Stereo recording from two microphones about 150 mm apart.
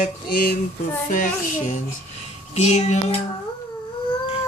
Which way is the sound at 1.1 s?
60° left (ahead or behind).